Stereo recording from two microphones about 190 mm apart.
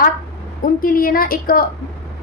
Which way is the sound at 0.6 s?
50° left (ahead or behind).